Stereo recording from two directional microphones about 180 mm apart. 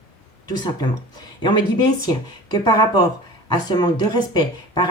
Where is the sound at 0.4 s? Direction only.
20° left (ahead or behind).